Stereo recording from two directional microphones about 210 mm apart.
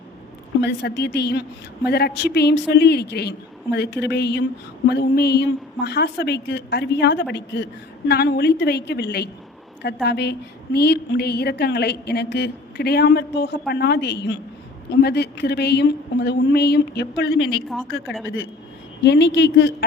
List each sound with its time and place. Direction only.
0.6 s a woman's voice: 55° left (ahead or behind)
19.0 s speech: 55° left (ahead or behind)